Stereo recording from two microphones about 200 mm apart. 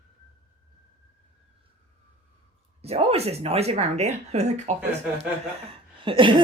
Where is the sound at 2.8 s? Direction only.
30° right (ahead or behind).